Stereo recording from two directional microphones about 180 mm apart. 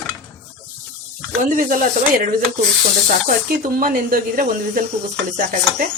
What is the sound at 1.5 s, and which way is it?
Speech, 45° right (ahead or behind).